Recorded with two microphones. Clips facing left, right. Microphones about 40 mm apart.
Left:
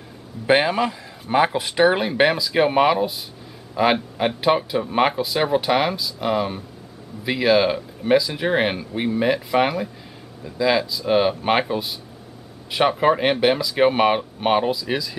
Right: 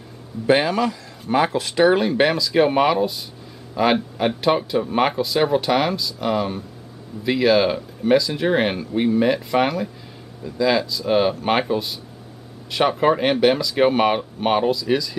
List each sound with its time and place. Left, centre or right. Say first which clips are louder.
0.5 s speech: even; centre